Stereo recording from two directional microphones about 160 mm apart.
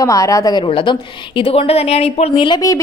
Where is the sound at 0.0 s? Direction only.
20° left (ahead or behind).